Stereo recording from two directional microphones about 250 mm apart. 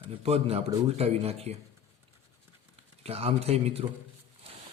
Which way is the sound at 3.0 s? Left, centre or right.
Right.